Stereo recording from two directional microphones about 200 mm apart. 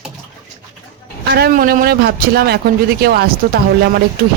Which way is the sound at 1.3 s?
50° right (ahead or behind).